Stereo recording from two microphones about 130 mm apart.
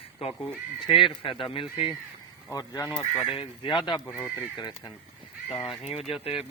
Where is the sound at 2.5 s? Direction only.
25° left (ahead or behind).